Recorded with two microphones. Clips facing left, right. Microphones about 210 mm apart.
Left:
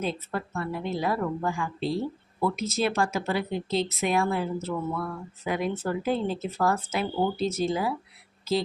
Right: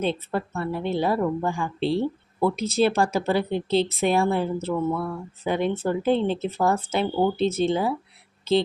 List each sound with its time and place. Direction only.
0.0 s a woman's voice: 30° right (ahead or behind)